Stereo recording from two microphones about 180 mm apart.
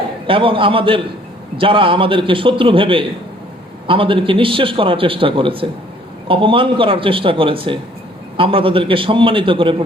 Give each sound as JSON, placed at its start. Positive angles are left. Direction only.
{"t": 0.3, "sound": "a man's voice", "side_deg": -30}